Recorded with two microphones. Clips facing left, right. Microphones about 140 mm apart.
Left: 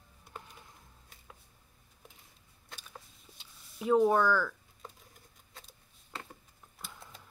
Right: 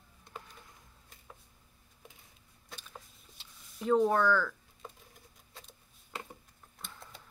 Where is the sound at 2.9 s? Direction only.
5° left (ahead or behind).